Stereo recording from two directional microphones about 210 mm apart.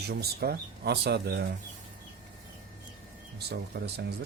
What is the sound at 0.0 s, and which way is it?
Speech, 50° right (ahead or behind).